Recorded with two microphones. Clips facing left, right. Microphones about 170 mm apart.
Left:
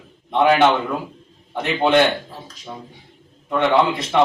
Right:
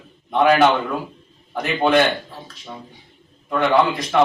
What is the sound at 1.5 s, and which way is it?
Speech, centre (ahead or behind).